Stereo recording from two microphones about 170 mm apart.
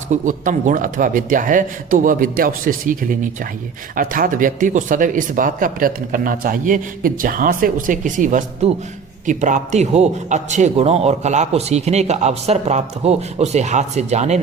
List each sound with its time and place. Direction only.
0.1 s a man's voice: 45° right (ahead or behind)